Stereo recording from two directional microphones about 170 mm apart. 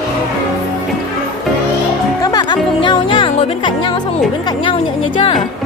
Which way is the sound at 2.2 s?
25° left (ahead or behind).